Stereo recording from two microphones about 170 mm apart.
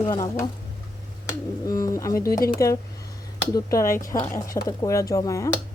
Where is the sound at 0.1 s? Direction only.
20° left (ahead or behind).